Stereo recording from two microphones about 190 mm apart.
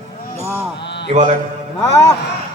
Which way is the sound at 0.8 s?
65° left (ahead or behind).